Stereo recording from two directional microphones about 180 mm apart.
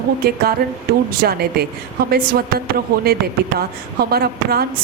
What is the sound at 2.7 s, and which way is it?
Speech, 60° right (ahead or behind).